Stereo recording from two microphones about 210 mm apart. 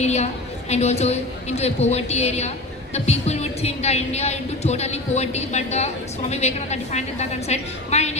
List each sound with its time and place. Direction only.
0.0 s a woman's voice: 30° left (ahead or behind)